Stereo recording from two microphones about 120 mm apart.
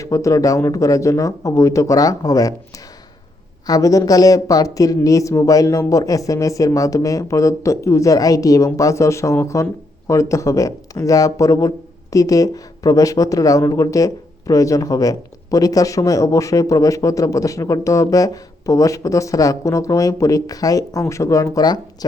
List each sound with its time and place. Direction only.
0.0 s speech: 25° left (ahead or behind)
3.7 s speech: 30° left (ahead or behind)